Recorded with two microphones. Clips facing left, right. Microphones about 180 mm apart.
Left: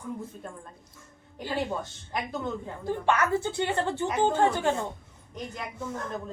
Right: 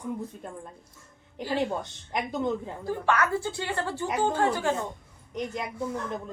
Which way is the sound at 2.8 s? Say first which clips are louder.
Left 1 dB; 25° left (ahead or behind).